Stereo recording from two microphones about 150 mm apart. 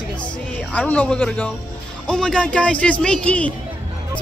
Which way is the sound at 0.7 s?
10° left (ahead or behind).